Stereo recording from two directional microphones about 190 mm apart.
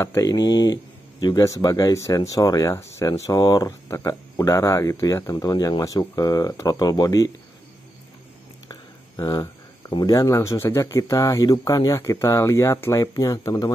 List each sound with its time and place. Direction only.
0.0 s speech: 15° left (ahead or behind)
8.6 s speech: 20° left (ahead or behind)